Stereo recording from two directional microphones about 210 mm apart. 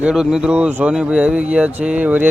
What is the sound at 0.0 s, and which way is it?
Speech, 5° right (ahead or behind).